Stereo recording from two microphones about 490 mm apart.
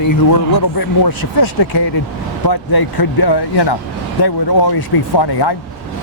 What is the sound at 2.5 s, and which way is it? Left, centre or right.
Speech, left.